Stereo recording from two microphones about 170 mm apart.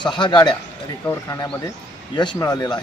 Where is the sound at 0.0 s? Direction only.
25° left (ahead or behind).